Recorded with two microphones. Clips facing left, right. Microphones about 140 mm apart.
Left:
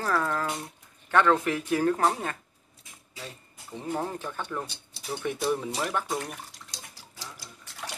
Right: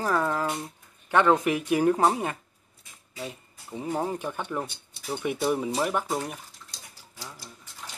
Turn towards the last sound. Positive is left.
turn(degrees=85)